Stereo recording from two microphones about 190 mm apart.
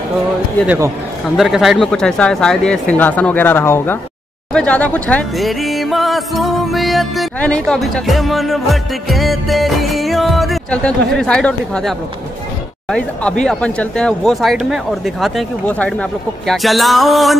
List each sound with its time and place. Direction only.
0.7 s a man's voice: 15° right (ahead or behind)
1.3 s speech: centre (ahead or behind)
12.9 s speech: 5° left (ahead or behind)